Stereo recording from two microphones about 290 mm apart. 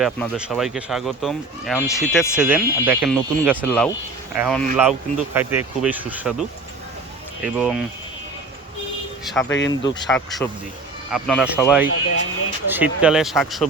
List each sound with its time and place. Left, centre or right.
0.0 s speech: centre
7.4 s speech: centre
9.2 s speech: centre
9.5 s speech: left
9.8 s speech: centre
10.1 s speech: centre